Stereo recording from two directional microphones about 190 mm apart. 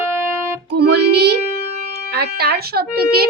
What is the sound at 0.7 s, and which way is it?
Speech, 60° right (ahead or behind).